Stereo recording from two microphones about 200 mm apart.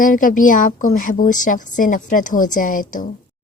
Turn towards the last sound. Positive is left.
turn(degrees=40)  # may be behind; listen again after turning